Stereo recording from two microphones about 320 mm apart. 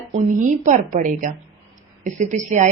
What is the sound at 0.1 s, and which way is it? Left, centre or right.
A woman's voice, right.